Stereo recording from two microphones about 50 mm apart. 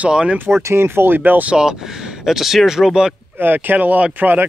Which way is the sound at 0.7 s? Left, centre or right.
Right.